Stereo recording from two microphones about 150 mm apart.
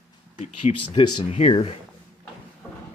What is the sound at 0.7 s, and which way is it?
Speech, 45° left (ahead or behind).